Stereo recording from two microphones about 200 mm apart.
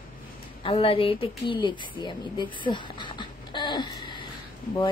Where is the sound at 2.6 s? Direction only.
25° left (ahead or behind).